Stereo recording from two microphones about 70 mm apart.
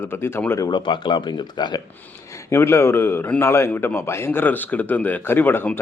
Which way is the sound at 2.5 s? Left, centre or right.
Left.